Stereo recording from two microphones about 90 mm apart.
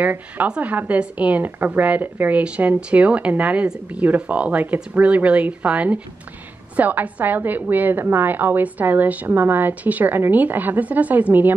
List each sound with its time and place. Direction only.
0.0 s a woman's voice: 15° right (ahead or behind)